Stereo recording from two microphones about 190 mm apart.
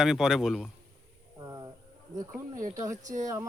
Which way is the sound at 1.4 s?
15° right (ahead or behind).